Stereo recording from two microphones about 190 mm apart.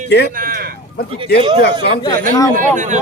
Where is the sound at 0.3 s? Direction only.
50° right (ahead or behind).